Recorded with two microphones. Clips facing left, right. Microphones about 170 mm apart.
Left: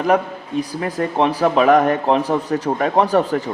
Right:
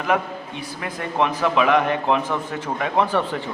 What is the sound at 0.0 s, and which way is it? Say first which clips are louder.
A man's voice: left 5 dB; 40° left (ahead or behind).